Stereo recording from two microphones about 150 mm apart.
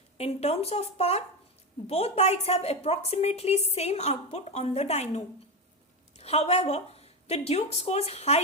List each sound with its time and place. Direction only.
0.2 s a woman's voice: 45° left (ahead or behind)